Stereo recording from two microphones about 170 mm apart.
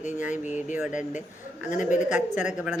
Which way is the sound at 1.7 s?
50° left (ahead or behind).